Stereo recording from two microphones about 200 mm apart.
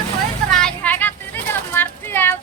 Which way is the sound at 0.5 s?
5° left (ahead or behind).